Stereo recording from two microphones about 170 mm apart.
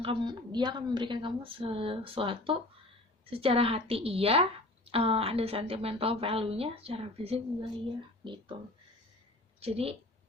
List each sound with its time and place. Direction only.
0.0 s a woman's voice: 30° right (ahead or behind)
9.6 s speech: 35° right (ahead or behind)